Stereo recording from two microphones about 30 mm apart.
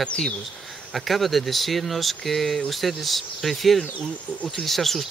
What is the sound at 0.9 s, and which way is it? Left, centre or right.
Speech, centre.